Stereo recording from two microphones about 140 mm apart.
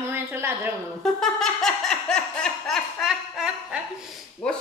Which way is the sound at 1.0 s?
5° left (ahead or behind).